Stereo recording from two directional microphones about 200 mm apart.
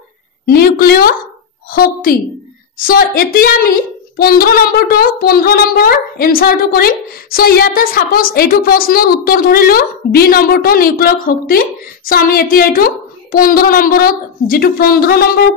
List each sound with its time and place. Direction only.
0.5 s a woman's voice: 50° left (ahead or behind)
1.7 s a sound: 45° left (ahead or behind)
2.9 s a woman's voice: 45° left (ahead or behind)